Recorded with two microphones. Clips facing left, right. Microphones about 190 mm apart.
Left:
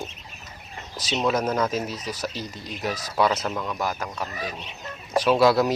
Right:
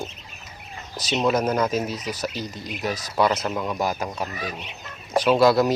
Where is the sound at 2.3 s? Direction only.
30° left (ahead or behind).